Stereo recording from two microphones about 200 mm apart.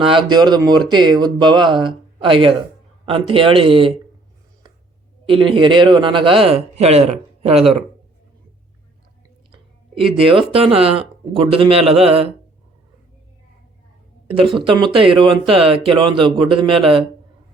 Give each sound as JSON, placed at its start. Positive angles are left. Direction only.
{"t": 0.0, "sound": "a man's voice", "side_deg": -25}
{"t": 5.3, "sound": "a man's voice", "side_deg": -25}
{"t": 10.3, "sound": "a man's voice", "side_deg": -30}
{"t": 14.5, "sound": "a man's voice", "side_deg": -25}